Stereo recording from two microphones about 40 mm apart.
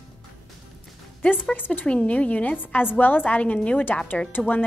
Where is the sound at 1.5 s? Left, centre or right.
Left.